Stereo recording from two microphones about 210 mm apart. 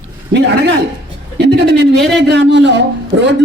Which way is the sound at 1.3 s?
55° right (ahead or behind).